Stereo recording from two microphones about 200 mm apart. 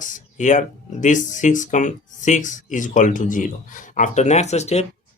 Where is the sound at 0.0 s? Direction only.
40° left (ahead or behind).